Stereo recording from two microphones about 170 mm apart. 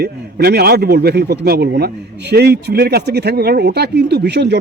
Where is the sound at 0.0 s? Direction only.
70° right (ahead or behind).